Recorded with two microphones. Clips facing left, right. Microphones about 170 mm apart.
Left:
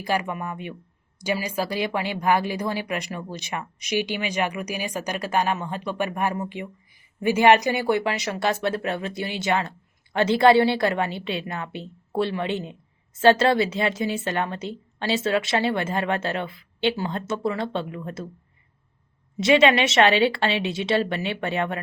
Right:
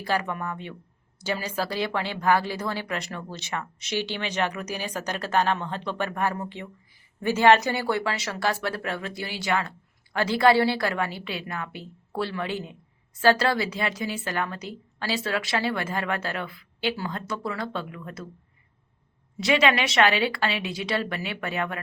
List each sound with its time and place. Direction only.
0.0 s a woman's voice: 15° left (ahead or behind)
19.4 s a woman's voice: 25° left (ahead or behind)